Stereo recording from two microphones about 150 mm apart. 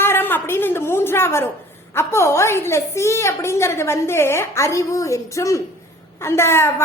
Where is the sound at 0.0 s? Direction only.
15° left (ahead or behind).